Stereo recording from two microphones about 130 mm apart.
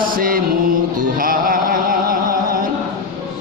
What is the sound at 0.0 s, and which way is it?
Mantra, 90° right.